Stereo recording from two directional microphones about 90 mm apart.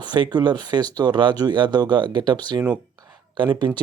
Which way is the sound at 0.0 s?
55° right (ahead or behind).